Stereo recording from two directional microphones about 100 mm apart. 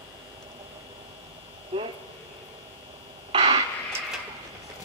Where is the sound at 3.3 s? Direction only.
75° right (ahead or behind).